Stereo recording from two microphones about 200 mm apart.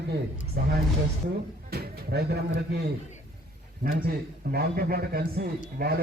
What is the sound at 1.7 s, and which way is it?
Speech, 55° right (ahead or behind).